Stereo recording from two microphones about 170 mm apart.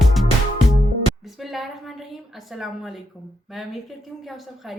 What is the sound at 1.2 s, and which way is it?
A woman's voice, centre (ahead or behind).